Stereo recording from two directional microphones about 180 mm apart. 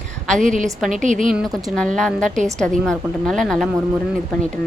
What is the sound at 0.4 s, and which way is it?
Speech, 45° right (ahead or behind).